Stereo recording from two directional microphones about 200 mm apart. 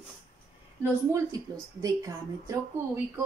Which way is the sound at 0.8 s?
15° right (ahead or behind).